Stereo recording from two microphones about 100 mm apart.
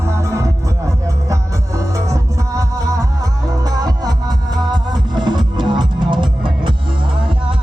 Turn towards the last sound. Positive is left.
turn(degrees=-55)  # may be behind; listen again after turning